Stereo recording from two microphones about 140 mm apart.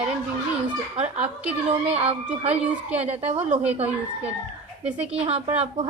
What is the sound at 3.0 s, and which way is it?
Speech, 50° right (ahead or behind).